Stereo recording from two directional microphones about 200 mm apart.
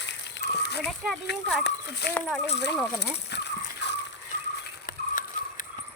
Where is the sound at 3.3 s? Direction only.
60° left (ahead or behind).